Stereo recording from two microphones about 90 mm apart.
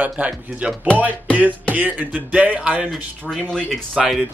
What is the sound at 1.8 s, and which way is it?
Speech, 20° right (ahead or behind).